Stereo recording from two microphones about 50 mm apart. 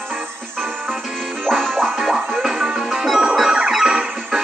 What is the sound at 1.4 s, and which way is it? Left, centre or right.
Music, centre.